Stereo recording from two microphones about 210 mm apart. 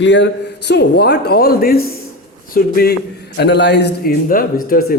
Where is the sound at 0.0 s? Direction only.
60° left (ahead or behind).